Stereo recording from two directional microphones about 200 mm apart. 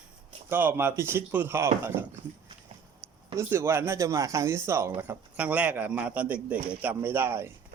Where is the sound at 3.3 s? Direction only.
15° right (ahead or behind).